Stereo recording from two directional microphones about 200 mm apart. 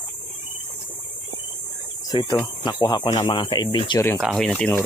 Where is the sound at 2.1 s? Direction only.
20° left (ahead or behind).